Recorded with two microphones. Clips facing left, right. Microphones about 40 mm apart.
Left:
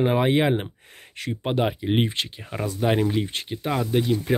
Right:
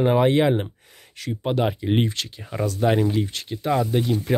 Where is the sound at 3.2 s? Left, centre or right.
Left.